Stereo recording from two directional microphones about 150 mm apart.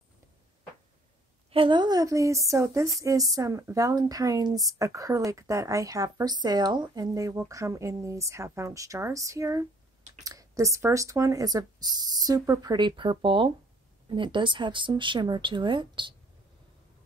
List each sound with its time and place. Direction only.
1.5 s speech: 35° right (ahead or behind)